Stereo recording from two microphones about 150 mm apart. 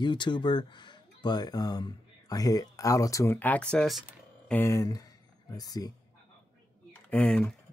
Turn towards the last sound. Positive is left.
turn(degrees=10)  # may be behind; listen again after turning